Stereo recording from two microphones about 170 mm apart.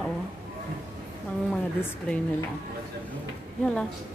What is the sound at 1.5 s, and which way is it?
Speech, 5° left (ahead or behind).